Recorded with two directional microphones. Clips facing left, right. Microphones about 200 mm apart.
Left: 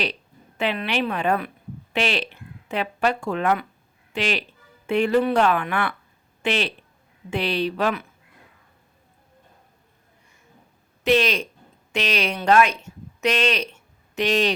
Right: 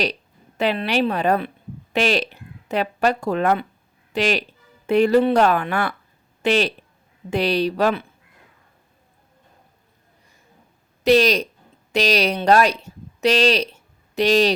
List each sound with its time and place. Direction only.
0.0 s a woman's voice: 40° right (ahead or behind)
11.0 s a woman's voice: 40° right (ahead or behind)